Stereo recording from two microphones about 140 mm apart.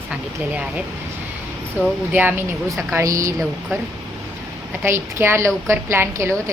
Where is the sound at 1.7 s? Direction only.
10° right (ahead or behind).